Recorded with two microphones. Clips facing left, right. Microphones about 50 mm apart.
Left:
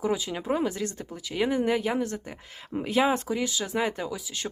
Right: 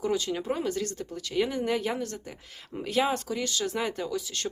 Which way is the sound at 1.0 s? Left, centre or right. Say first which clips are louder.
Left 2 dB; centre.